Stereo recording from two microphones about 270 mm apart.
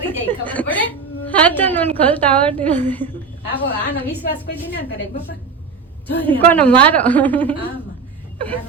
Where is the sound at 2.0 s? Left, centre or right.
Centre.